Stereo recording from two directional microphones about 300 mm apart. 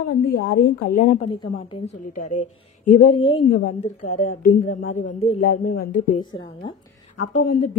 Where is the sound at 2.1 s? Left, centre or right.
Left.